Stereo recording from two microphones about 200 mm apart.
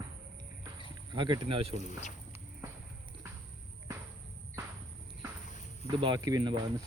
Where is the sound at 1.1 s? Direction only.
25° right (ahead or behind).